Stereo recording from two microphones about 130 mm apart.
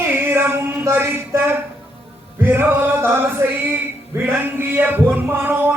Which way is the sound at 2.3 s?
15° right (ahead or behind).